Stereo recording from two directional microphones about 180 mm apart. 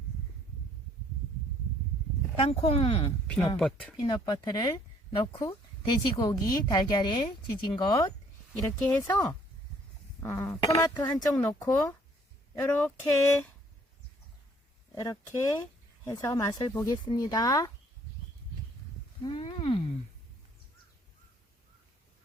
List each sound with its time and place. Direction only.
2.3 s speech: 35° left (ahead or behind)
3.2 s speech: 10° left (ahead or behind)
4.0 s speech: 25° left (ahead or behind)
10.2 s speech: 15° left (ahead or behind)
14.9 s speech: 20° left (ahead or behind)
19.2 s a sound: 25° left (ahead or behind)